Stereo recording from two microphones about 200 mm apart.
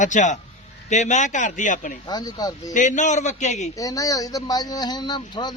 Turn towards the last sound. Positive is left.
turn(degrees=20)  # may be behind; listen again after turning